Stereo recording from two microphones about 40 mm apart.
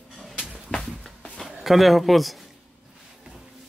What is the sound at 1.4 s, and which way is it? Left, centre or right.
Speech, centre.